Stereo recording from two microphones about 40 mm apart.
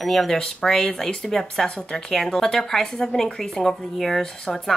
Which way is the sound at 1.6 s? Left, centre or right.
Left.